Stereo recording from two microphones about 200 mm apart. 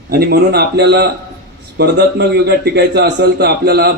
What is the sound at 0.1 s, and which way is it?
A man's voice, 50° right (ahead or behind).